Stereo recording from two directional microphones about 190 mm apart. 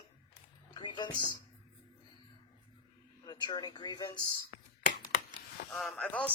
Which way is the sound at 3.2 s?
20° left (ahead or behind).